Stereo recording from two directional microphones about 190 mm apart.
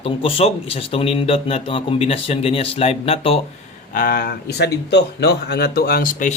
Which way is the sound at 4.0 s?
50° left (ahead or behind).